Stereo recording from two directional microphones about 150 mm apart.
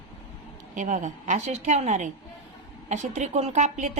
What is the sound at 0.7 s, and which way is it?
A woman's voice, 55° right (ahead or behind).